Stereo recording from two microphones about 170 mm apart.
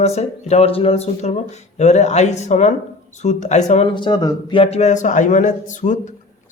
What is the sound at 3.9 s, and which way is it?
A man's voice, 25° left (ahead or behind).